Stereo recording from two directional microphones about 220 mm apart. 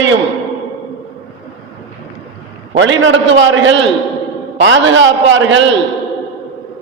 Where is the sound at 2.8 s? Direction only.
60° right (ahead or behind).